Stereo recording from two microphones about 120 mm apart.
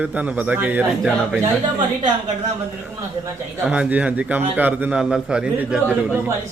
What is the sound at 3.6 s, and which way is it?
A man's voice, 10° right (ahead or behind).